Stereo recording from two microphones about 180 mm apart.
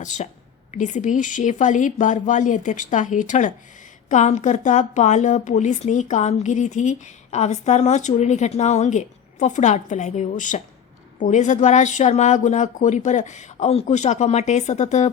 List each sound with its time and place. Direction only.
0.0 s a woman's voice: 40° left (ahead or behind)